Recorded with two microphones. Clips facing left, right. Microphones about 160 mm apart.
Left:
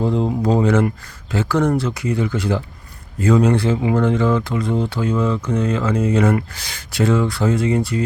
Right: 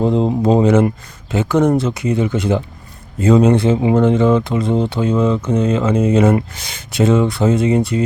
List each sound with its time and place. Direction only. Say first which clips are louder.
0.0 s speech: right 4 dB; 20° right (ahead or behind)